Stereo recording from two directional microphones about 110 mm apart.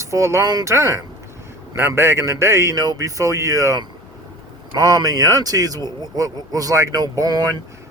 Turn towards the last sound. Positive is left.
turn(degrees=-35)  # may be behind; listen again after turning